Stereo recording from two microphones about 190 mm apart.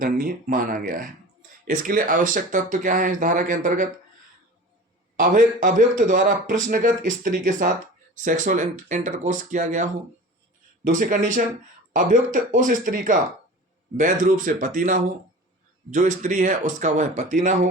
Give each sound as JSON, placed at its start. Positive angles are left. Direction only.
{"t": 0.0, "sound": "a man's voice", "side_deg": -45}
{"t": 5.2, "sound": "a man's voice", "side_deg": -45}